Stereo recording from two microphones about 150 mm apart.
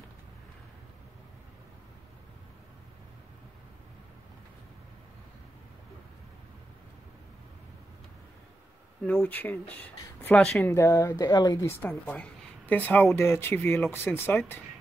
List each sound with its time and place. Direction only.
9.0 s a woman's voice: 10° left (ahead or behind)
10.6 s speech: 20° left (ahead or behind)
11.8 s a woman's voice: 10° left (ahead or behind)